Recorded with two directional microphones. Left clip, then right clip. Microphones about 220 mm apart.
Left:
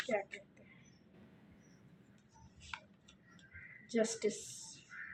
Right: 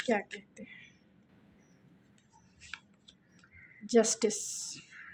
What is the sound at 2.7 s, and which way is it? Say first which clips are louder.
Tick-tock: right 2 dB; 15° right (ahead or behind).